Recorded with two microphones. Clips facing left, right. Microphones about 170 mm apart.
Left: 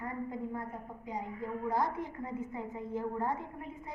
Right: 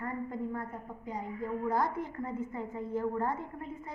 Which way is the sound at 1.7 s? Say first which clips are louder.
Even; 15° left (ahead or behind).